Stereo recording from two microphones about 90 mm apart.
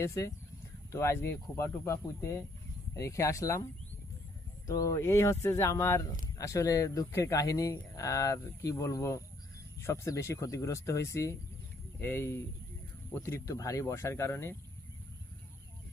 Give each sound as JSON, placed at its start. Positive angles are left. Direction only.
{"t": 0.0, "sound": "speech", "side_deg": 35}
{"t": 4.6, "sound": "speech", "side_deg": 40}